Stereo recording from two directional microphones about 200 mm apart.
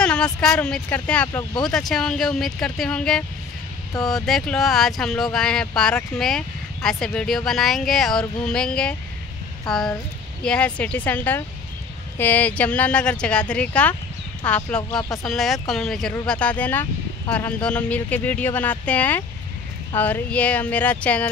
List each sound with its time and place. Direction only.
0.0 s a sound: 5° left (ahead or behind)
0.7 s speech: 5° left (ahead or behind)
14.8 s speech: 20° left (ahead or behind)
15.2 s speech: centre (ahead or behind)